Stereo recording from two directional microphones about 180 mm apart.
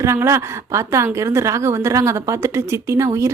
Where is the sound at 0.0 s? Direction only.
15° right (ahead or behind).